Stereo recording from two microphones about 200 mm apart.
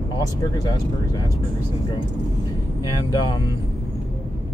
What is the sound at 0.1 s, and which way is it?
Speech, 20° left (ahead or behind).